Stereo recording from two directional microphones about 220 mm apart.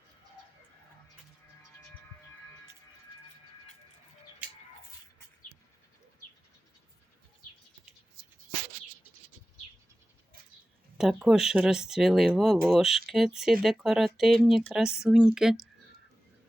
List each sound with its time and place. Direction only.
10.9 s speech: centre (ahead or behind)